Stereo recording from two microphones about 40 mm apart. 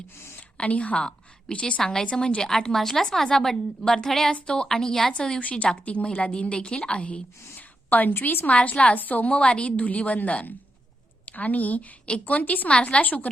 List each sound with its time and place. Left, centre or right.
0.5 s a woman's voice: left
0.9 s a woman's voice: left
4.7 s a woman's voice: centre
5.4 s a woman's voice: left
7.5 s a sound: left
8.2 s a woman's voice: left
8.4 s a woman's voice: left
9.0 s a woman's voice: left
9.7 s a woman's voice: left
12.7 s a woman's voice: left
13.0 s a woman's voice: left